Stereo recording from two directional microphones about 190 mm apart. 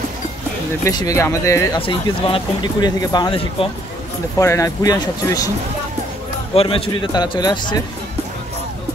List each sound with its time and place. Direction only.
0.8 s speech: 15° left (ahead or behind)
6.5 s speech: 30° left (ahead or behind)